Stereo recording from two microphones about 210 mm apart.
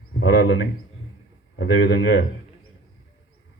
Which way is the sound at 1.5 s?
55° left (ahead or behind).